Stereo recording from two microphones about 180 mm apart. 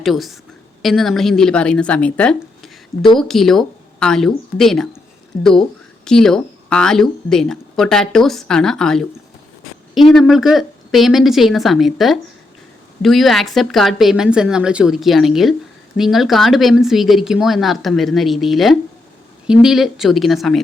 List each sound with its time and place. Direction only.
0.0 s a woman's voice: centre (ahead or behind)